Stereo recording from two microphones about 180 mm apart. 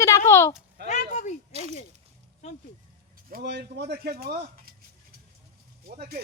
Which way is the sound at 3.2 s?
60° right (ahead or behind).